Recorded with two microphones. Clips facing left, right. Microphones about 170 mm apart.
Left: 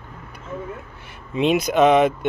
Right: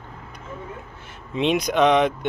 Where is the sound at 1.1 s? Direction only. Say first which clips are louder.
Left 2 dB; 5° left (ahead or behind).